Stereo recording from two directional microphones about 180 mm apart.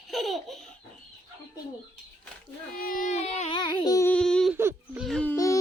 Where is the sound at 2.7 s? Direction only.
50° left (ahead or behind); by 4.1 s 20° left (ahead or behind).